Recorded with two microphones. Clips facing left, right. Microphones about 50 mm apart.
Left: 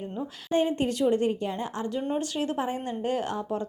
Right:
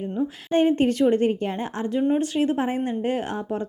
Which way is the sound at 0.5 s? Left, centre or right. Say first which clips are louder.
Right 5 dB; right.